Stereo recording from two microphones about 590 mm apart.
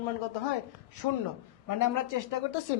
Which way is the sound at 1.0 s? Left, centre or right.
Left.